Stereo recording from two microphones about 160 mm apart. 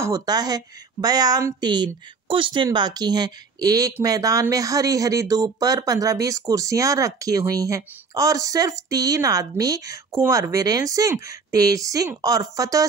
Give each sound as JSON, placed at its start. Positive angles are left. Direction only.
{"t": 0.0, "sound": "a woman's voice", "side_deg": -20}